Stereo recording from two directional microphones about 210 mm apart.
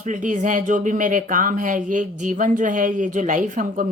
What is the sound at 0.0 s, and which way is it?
Speech, 35° right (ahead or behind).